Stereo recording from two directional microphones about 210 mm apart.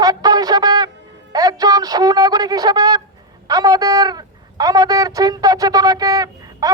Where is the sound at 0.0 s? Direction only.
20° right (ahead or behind).